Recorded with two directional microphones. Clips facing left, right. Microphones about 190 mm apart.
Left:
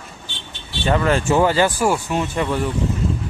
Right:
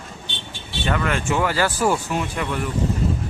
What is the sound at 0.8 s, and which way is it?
Speech, 30° left (ahead or behind).